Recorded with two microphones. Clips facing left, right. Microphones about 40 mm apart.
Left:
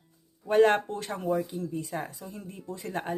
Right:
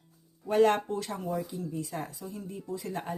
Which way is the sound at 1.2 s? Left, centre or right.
Left.